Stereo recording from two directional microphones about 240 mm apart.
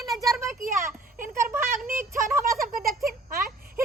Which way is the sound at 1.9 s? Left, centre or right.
Centre.